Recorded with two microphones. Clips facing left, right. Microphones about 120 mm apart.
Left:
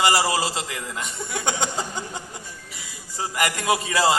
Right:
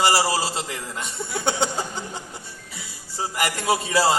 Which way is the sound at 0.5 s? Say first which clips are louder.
Even; centre (ahead or behind).